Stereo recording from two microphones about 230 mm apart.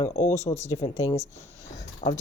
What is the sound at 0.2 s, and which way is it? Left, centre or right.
Speech, centre.